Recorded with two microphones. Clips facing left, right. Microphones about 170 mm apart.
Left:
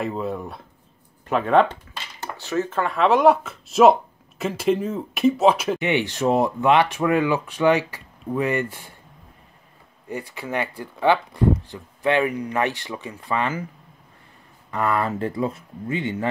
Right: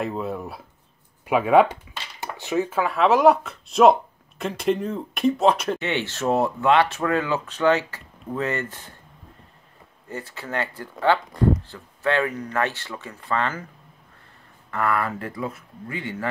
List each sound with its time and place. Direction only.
0.0 s speech: centre (ahead or behind)
2.8 s speech: centre (ahead or behind)
5.8 s speech: 15° left (ahead or behind)
10.0 s speech: 15° left (ahead or behind)
14.7 s speech: 20° left (ahead or behind)